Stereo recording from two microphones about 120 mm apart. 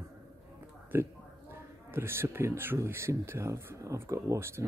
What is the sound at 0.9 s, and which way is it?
Speech, 15° right (ahead or behind).